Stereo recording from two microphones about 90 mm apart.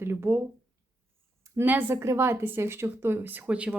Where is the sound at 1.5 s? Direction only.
25° right (ahead or behind).